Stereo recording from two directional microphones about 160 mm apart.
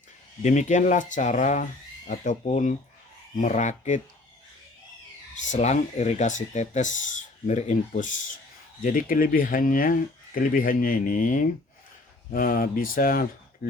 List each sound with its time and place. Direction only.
0.4 s speech: 50° left (ahead or behind)
5.3 s speech: 50° left (ahead or behind)